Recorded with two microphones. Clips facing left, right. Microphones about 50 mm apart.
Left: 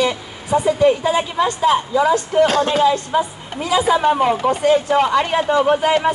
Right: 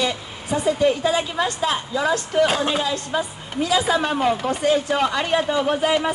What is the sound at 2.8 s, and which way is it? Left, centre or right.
Speech, centre.